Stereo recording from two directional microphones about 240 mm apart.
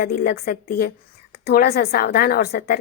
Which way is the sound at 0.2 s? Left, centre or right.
Left.